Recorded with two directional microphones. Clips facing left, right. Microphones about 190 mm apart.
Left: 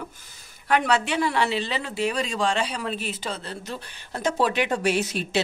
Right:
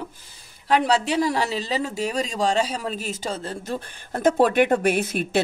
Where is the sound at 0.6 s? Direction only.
35° right (ahead or behind).